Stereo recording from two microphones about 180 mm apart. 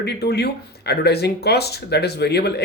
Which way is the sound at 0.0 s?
65° left (ahead or behind).